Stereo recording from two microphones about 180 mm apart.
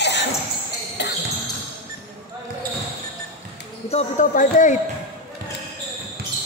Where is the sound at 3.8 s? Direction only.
40° left (ahead or behind).